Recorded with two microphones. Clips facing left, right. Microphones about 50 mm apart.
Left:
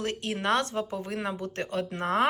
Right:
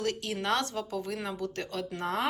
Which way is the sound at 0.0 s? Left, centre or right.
Left.